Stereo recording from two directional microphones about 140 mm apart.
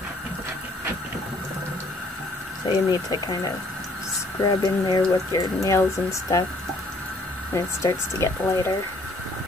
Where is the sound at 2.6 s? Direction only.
30° left (ahead or behind).